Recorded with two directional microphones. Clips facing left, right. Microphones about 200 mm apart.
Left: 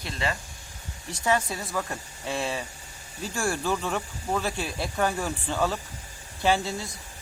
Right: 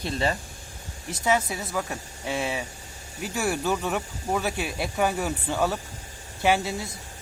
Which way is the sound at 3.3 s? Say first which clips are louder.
Right 2 dB; 5° right (ahead or behind).